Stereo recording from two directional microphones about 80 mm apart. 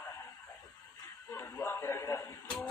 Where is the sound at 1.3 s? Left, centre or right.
Left.